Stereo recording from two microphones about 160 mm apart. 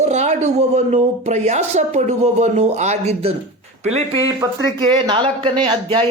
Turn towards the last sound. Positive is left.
turn(degrees=-30)  # may be behind; listen again after turning